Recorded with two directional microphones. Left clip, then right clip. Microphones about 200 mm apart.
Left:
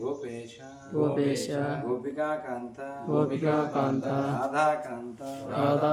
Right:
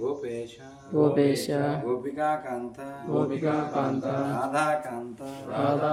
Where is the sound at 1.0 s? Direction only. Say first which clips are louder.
Right 4 dB; 20° right (ahead or behind).